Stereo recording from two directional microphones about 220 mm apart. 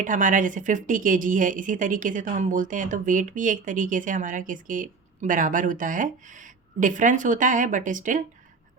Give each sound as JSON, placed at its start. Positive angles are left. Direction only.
{"t": 0.0, "sound": "speech", "side_deg": -35}